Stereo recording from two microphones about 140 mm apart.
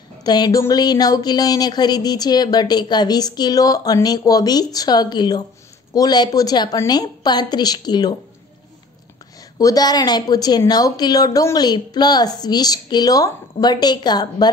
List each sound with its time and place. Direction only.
0.2 s a woman's voice: 30° left (ahead or behind)
9.4 s a woman's voice: 25° left (ahead or behind)